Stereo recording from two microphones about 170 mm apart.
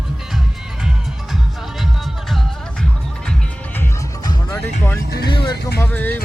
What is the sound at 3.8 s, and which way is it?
Music, 20° left (ahead or behind).